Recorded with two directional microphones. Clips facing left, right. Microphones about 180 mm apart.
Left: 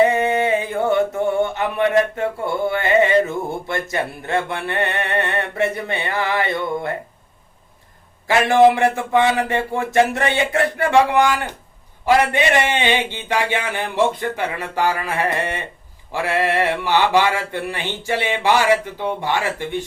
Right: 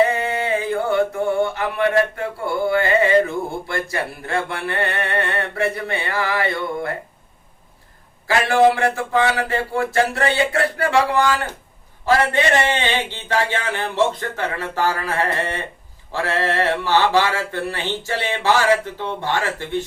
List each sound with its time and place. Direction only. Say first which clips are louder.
0.0 s a sound: left 3 dB; 20° left (ahead or behind)
8.3 s speech: left 2 dB; 20° left (ahead or behind)
12.0 s mantra: left 1 dB; 15° left (ahead or behind)